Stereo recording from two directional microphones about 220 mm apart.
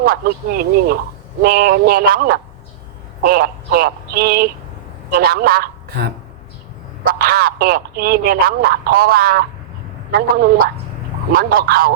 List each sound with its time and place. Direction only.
0.0 s a man's voice: 40° right (ahead or behind)